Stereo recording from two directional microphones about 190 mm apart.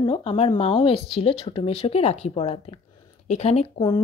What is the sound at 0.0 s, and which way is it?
Speech, 25° left (ahead or behind).